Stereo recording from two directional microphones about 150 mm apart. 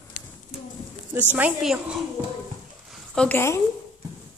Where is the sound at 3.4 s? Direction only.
15° left (ahead or behind).